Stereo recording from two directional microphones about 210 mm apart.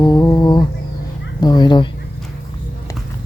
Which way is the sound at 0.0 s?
15° left (ahead or behind).